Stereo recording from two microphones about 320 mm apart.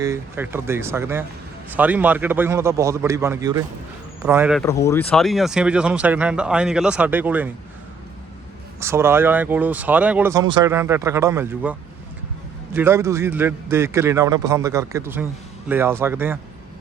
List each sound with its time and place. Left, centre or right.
0.0 s speech: centre
4.6 s speech: centre
8.8 s speech: centre